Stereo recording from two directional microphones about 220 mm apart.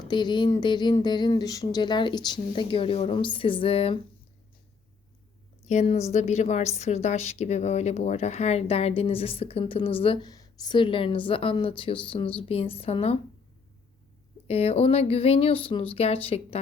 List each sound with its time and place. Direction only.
0.1 s a woman's voice: 20° left (ahead or behind)
5.6 s a woman's voice: 30° left (ahead or behind)
14.4 s a woman's voice: 25° left (ahead or behind)